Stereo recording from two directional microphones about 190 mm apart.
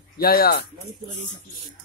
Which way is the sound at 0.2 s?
50° left (ahead or behind).